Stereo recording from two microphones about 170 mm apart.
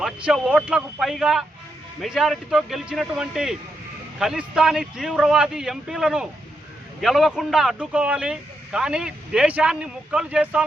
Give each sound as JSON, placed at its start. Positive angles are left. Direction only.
{"t": 0.0, "sound": "speech", "side_deg": -5}